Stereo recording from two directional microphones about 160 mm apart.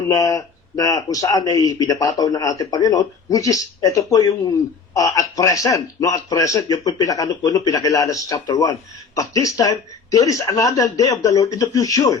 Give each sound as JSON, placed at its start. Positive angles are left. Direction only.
{"t": 0.1, "sound": "speech", "side_deg": 20}